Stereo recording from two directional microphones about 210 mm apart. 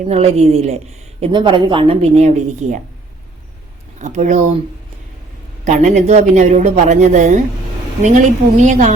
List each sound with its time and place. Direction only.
0.1 s a woman's voice: 30° right (ahead or behind)
3.9 s a woman's voice: 35° right (ahead or behind)
5.6 s a woman's voice: 35° right (ahead or behind)